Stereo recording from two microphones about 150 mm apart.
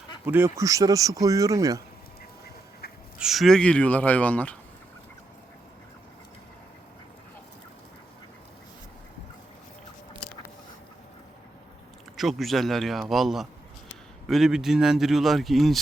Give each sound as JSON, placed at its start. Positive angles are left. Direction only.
{"t": 0.3, "sound": "speech", "side_deg": -15}
{"t": 3.2, "sound": "speech", "side_deg": 0}
{"t": 12.1, "sound": "speech", "side_deg": 0}